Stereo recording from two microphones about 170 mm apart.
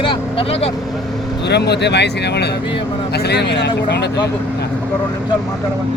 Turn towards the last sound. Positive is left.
turn(degrees=80)